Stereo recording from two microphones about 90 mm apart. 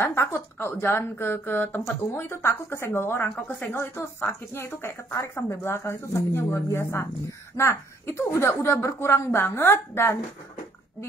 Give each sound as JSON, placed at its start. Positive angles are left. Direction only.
{"t": 0.0, "sound": "a woman's voice", "side_deg": 25}